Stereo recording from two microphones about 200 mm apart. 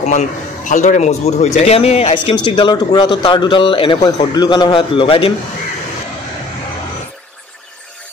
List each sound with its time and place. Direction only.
0.0 s a man's voice: 35° left (ahead or behind)